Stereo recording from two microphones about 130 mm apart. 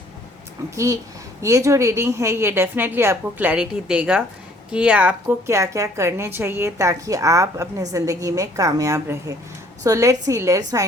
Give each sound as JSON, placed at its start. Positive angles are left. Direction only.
{"t": 1.4, "sound": "a woman's voice", "side_deg": -25}
{"t": 5.5, "sound": "a woman's voice", "side_deg": -25}